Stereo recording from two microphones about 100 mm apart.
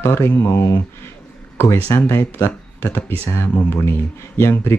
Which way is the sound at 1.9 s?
25° left (ahead or behind).